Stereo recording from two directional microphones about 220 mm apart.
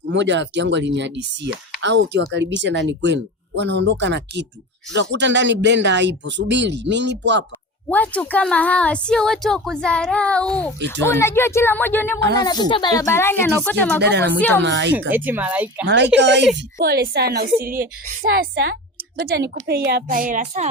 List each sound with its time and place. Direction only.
0.1 s speech: 55° right (ahead or behind)
7.9 s speech: 5° left (ahead or behind)
14.0 s speech: 50° right (ahead or behind)
15.1 s speech: 10° right (ahead or behind)
16.1 s a woman's voice: 55° right (ahead or behind); by 20.7 s 35° right (ahead or behind)